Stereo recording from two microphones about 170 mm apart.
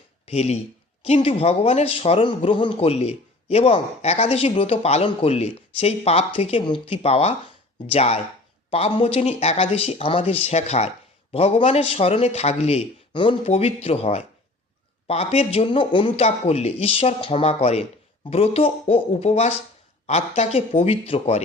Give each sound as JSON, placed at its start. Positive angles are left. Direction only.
{"t": 0.3, "sound": "speech", "side_deg": 40}